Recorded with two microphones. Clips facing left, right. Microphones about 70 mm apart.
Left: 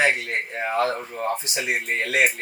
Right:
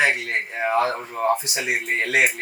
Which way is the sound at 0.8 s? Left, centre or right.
Right.